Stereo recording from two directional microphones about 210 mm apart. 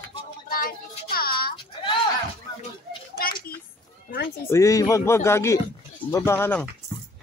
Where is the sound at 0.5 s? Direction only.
45° left (ahead or behind).